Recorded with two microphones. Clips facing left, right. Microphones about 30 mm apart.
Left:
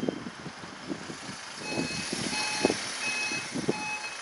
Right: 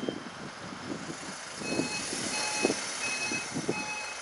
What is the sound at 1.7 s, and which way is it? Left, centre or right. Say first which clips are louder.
Reversing beeps: even; left.